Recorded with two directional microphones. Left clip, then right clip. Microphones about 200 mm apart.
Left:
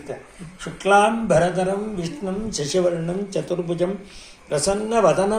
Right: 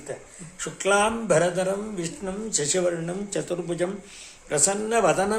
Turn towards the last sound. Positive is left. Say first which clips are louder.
# left 4 dB
turn(degrees=-15)  # may be behind; listen again after turning